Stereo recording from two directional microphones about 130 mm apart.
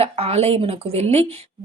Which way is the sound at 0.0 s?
50° right (ahead or behind).